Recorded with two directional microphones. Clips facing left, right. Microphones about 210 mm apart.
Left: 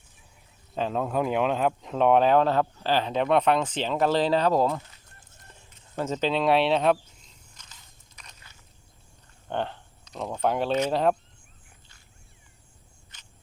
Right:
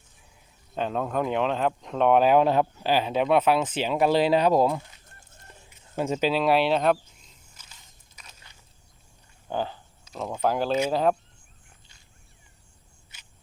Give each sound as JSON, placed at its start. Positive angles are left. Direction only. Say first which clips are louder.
{"t": 0.8, "sound": "speech", "louder": "even", "side_deg": 0}
{"t": 7.6, "sound": "biting", "louder": "left 1 dB", "side_deg": -5}
{"t": 9.5, "sound": "speech", "louder": "right 1 dB", "side_deg": -5}
{"t": 13.1, "sound": "a sound", "louder": "right 1 dB", "side_deg": -10}